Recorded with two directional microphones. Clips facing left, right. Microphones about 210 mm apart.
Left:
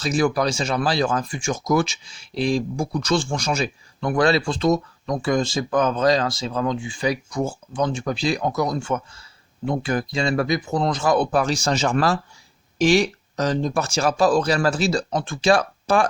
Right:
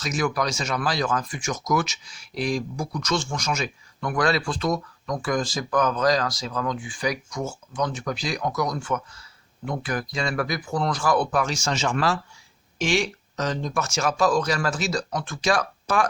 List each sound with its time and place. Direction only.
0.0 s speech: 30° left (ahead or behind)